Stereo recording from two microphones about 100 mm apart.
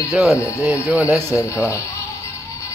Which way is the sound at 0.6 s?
15° right (ahead or behind).